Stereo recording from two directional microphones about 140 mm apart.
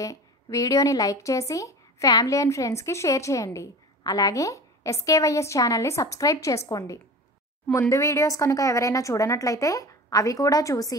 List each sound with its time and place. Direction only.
0.0 s a woman's voice: 25° left (ahead or behind)
7.9 s a woman's voice: 20° left (ahead or behind)